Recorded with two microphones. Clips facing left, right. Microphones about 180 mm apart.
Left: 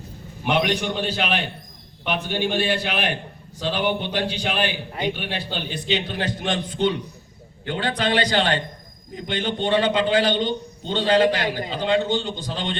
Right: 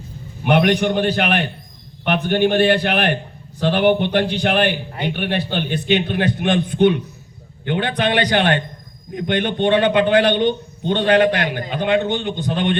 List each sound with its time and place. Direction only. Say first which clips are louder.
0.4 s a man's voice: right 6 dB; 55° right (ahead or behind)